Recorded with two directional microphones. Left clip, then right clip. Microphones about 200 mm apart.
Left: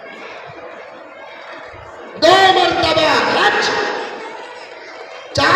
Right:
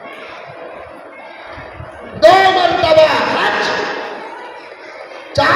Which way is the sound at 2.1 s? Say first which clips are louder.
Right 2 dB; 45° left (ahead or behind).